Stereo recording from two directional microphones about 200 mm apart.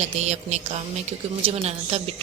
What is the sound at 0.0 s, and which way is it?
A woman's voice, 35° right (ahead or behind).